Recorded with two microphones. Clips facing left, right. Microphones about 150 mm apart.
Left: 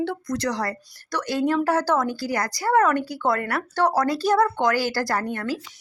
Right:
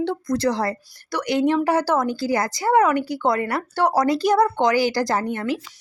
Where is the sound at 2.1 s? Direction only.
25° right (ahead or behind).